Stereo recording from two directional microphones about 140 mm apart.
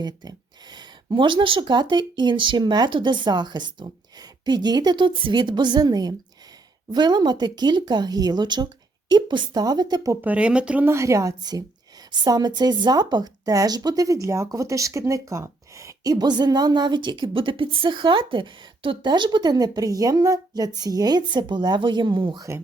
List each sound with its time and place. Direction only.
0.0 s speech: 30° right (ahead or behind)
10.2 s a woman's voice: 10° right (ahead or behind); by 22.4 s 35° right (ahead or behind)